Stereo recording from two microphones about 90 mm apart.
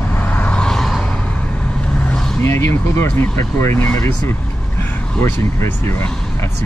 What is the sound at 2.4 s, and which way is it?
Speech, 30° left (ahead or behind).